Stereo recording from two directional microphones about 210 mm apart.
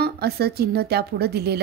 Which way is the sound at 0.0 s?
50° right (ahead or behind).